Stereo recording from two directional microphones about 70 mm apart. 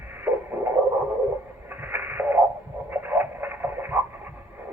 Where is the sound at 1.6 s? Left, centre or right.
Right.